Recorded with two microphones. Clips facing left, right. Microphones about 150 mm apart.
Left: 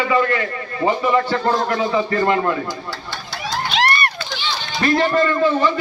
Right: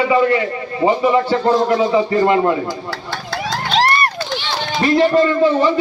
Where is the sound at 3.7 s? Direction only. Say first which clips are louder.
Right 5 dB; 40° right (ahead or behind).